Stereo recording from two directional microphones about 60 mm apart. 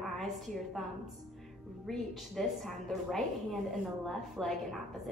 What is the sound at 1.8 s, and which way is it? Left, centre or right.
A woman's voice, centre.